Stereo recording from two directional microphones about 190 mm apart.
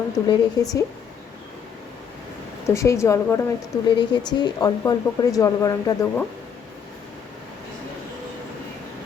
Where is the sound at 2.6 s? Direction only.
15° left (ahead or behind).